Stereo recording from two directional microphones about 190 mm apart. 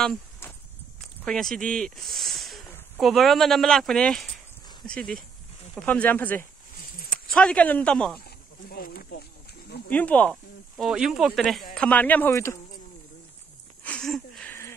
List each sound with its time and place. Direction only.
1.2 s speech: centre (ahead or behind)
8.6 s speech: 55° left (ahead or behind)
9.8 s speech: 5° left (ahead or behind)
10.3 s speech: 5° right (ahead or behind); by 12.5 s 15° left (ahead or behind)
13.8 s a sound: 5° left (ahead or behind)